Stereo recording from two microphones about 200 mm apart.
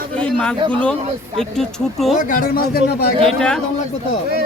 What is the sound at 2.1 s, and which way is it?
A man's voice, 45° left (ahead or behind).